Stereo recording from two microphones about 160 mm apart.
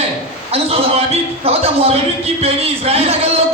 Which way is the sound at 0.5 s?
40° right (ahead or behind).